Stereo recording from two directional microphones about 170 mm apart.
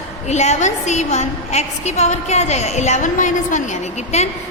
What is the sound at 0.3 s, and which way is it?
A woman's voice, 40° left (ahead or behind).